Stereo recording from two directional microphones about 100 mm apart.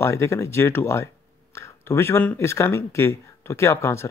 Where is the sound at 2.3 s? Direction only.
25° left (ahead or behind).